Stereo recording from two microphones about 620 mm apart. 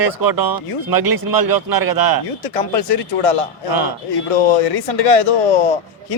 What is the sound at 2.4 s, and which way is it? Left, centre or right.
Speech, left.